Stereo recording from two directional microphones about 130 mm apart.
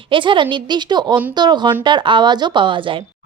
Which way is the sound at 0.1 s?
40° right (ahead or behind).